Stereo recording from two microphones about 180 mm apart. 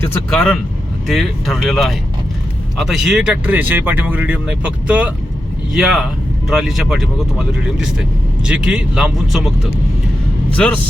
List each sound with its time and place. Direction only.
0.3 s speech: 5° left (ahead or behind)
10.5 s a man's voice: 10° left (ahead or behind)